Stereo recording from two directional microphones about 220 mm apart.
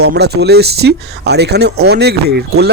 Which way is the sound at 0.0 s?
50° right (ahead or behind).